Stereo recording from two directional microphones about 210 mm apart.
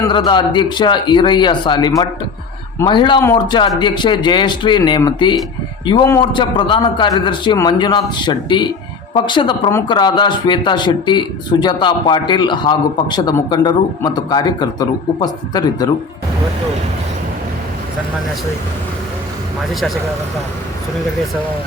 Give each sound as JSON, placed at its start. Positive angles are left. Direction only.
{"t": 0.0, "sound": "speech", "side_deg": 20}